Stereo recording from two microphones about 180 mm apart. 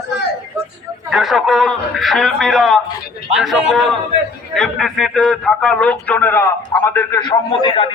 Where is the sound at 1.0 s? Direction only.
Centre (ahead or behind).